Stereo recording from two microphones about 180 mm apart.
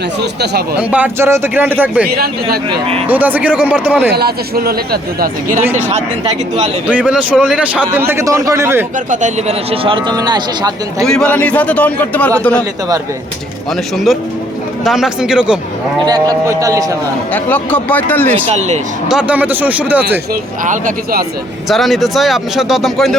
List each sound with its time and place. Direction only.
0.8 s a man's voice: 10° right (ahead or behind)
2.0 s speech: 60° right (ahead or behind)
3.1 s a man's voice: 10° right (ahead or behind)
4.1 s speech: 60° right (ahead or behind)
6.8 s a man's voice: 5° right (ahead or behind)
9.0 s speech: 40° right (ahead or behind); by 10.7 s 25° right (ahead or behind)
11.0 s a man's voice: 5° left (ahead or behind)
14.8 s speech: 5° right (ahead or behind)
16.0 s speech: 20° right (ahead or behind)
17.3 s a man's voice: 10° left (ahead or behind)
19.0 s a man's voice: 5° right (ahead or behind)
20.7 s speech: 50° right (ahead or behind)
21.7 s speech: centre (ahead or behind)